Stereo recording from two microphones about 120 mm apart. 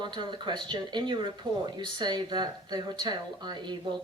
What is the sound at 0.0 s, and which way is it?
Speech, 40° right (ahead or behind).